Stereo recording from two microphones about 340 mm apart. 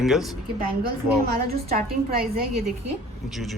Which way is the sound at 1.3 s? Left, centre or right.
Right.